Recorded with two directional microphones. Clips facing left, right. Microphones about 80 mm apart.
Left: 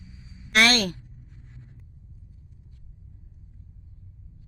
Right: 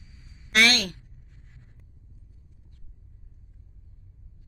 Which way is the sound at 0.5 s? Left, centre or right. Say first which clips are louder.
Left 2 dB; left.